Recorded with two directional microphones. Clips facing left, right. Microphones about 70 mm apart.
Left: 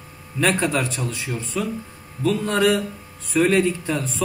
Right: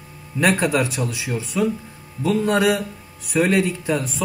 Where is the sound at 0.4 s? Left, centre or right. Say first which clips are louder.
Right 2 dB; centre.